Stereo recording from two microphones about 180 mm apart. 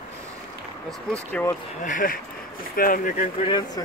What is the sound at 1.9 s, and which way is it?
Speech, 50° left (ahead or behind).